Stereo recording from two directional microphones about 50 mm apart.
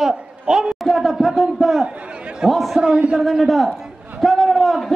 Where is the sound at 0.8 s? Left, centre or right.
Centre.